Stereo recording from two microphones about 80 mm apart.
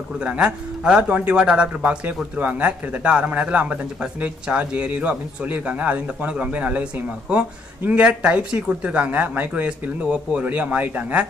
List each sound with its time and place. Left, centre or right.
0.2 s speech: centre